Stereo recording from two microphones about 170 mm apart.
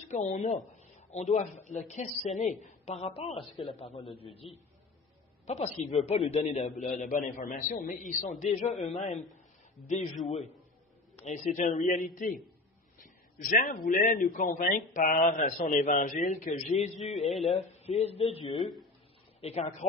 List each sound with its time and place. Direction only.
0.1 s a man's voice: 40° left (ahead or behind)
17.2 s speech: centre (ahead or behind)
17.5 s a man's voice: 40° left (ahead or behind)
18.6 s speech: centre (ahead or behind)
19.4 s a man's voice: 40° left (ahead or behind)